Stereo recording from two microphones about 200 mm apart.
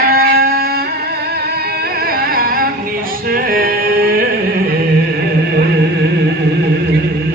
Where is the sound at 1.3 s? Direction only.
50° right (ahead or behind).